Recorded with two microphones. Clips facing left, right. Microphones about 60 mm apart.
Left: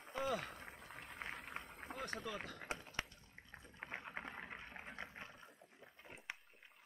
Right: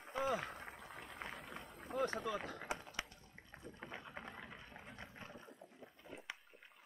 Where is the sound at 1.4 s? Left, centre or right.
Left.